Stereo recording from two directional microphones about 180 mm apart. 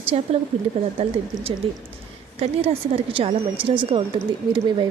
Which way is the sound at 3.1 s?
30° right (ahead or behind).